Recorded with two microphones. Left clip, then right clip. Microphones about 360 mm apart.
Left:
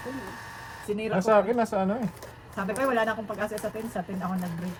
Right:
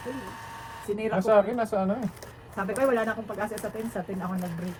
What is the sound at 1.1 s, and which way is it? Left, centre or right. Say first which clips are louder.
Speech: even; left.